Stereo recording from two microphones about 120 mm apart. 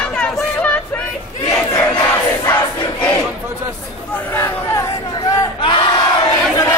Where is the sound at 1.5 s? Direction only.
30° left (ahead or behind).